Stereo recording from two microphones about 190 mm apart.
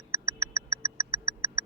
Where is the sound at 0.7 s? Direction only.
15° right (ahead or behind).